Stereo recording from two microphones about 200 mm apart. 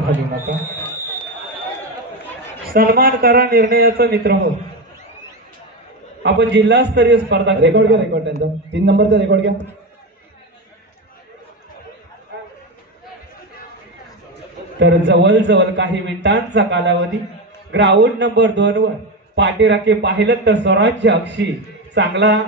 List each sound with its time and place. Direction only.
2.7 s a man's voice: 50° right (ahead or behind)
6.2 s a man's voice: 60° right (ahead or behind)
14.8 s a man's voice: 60° right (ahead or behind)